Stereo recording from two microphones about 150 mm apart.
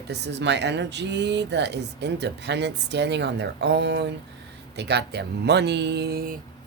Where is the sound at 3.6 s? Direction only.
90° right.